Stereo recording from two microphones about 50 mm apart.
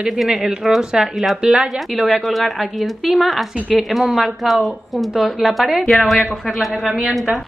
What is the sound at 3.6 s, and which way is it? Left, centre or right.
Speech, right.